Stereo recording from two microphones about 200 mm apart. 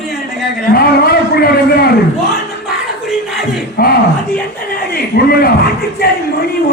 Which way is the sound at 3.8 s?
50° left (ahead or behind).